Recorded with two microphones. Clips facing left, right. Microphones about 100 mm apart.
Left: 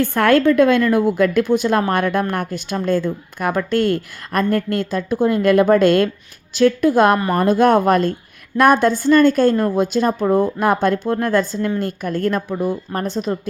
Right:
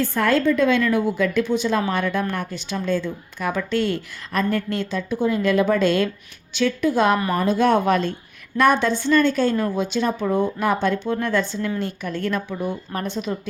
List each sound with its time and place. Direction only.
0.0 s a woman's voice: 65° left (ahead or behind); by 13.5 s 40° left (ahead or behind)